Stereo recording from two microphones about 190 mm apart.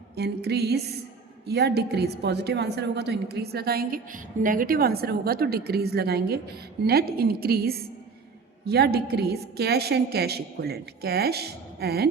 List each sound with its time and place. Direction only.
0.2 s a woman's voice: 60° right (ahead or behind)